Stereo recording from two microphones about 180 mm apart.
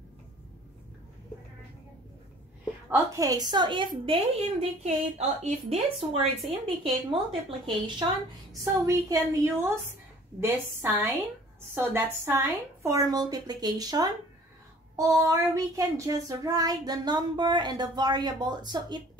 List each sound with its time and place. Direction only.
2.9 s child singing: 20° right (ahead or behind)
8.8 s a woman's voice: 15° right (ahead or behind)
11.7 s child singing: 15° right (ahead or behind)